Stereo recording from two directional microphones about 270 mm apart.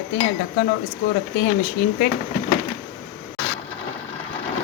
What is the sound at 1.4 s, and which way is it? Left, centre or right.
Speech, left.